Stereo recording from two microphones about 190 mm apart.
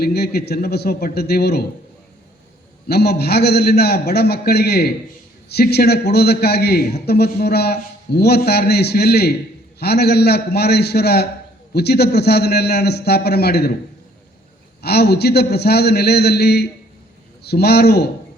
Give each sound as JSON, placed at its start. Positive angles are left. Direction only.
{"t": 0.0, "sound": "a man's voice", "side_deg": 60}
{"t": 2.9, "sound": "a man's voice", "side_deg": 60}
{"t": 14.8, "sound": "a man's voice", "side_deg": 60}